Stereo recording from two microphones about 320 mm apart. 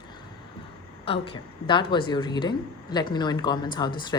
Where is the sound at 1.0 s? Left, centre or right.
Centre.